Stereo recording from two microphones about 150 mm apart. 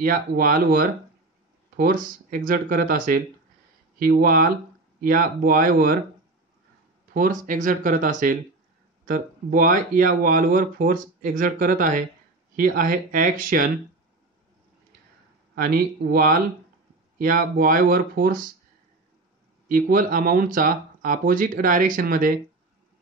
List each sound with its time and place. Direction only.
0.0 s speech: 70° right (ahead or behind)
4.0 s speech: 75° right (ahead or behind)
7.2 s speech: 60° right (ahead or behind)
15.5 s speech: 85° right
17.2 s speech: 70° right (ahead or behind)
19.7 s speech: 70° right (ahead or behind)